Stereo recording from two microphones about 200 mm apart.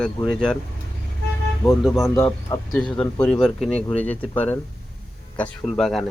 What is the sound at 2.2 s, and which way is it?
Speech, 20° left (ahead or behind).